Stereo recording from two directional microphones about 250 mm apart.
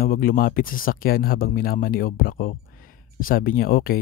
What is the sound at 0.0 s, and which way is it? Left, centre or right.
Speech, left.